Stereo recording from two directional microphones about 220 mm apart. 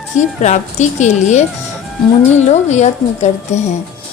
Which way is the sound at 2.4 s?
30° left (ahead or behind).